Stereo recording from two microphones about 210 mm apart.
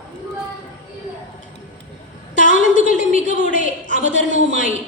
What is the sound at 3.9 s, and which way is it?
Speech, 60° right (ahead or behind).